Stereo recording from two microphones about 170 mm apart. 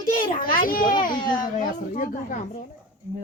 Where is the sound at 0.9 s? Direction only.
25° left (ahead or behind).